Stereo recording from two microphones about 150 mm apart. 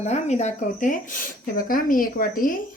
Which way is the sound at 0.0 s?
50° left (ahead or behind).